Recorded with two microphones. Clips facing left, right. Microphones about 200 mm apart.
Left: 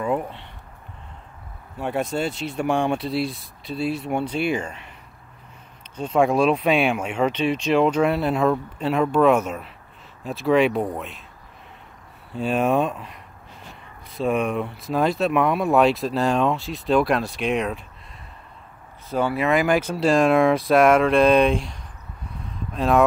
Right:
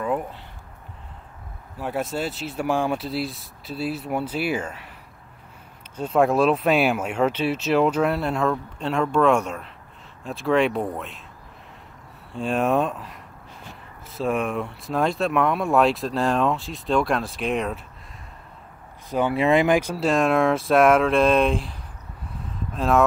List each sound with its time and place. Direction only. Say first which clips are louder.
0.0 s a sound: left 1 dB; centre (ahead or behind)
1.8 s speech: left 2 dB; 5° right (ahead or behind)
5.9 s speech: even; 5° right (ahead or behind)
12.3 s speech: left 1 dB; centre (ahead or behind)
19.0 s speech: even; 15° right (ahead or behind)
19.3 s speech: right 2 dB; 25° right (ahead or behind)
19.8 s speech: left 3 dB; 5° right (ahead or behind)